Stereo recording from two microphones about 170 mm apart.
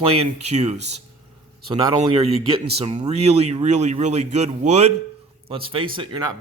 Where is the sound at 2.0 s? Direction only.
30° right (ahead or behind).